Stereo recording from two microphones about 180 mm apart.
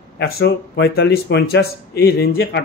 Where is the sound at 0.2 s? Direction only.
65° left (ahead or behind).